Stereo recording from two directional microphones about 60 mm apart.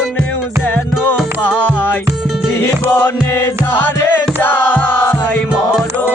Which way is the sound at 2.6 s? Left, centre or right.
Left.